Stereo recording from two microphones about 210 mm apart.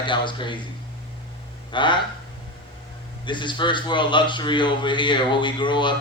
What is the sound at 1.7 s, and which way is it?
Speech, 20° left (ahead or behind).